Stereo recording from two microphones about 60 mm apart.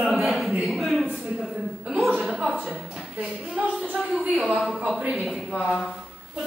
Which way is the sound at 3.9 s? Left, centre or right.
Centre.